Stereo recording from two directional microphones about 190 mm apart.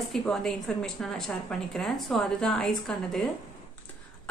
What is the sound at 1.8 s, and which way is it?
A woman's voice, centre (ahead or behind).